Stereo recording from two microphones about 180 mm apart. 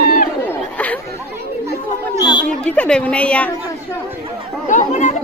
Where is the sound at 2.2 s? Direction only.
25° left (ahead or behind).